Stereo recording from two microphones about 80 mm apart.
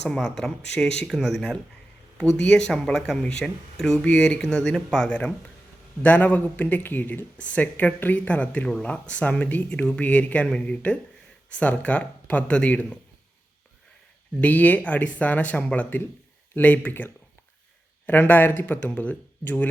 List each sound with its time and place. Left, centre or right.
0.3 s speech: centre
6.0 s speech: left
14.4 s speech: left